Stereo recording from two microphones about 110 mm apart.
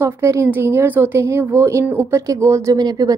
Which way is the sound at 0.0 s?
25° right (ahead or behind).